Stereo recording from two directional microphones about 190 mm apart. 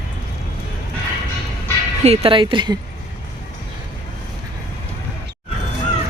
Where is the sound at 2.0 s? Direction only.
30° right (ahead or behind).